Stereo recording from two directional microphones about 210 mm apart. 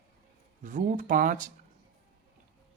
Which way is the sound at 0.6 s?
40° right (ahead or behind).